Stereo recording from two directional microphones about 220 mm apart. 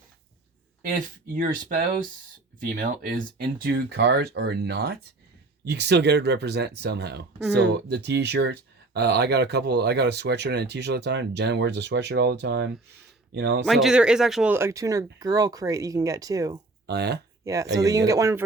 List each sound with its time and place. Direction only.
0.8 s speech: 40° right (ahead or behind)
13.7 s speech: centre (ahead or behind)
16.8 s speech: 50° right (ahead or behind)
17.4 s speech: 15° right (ahead or behind)